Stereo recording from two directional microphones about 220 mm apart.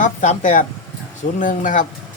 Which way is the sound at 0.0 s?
35° left (ahead or behind).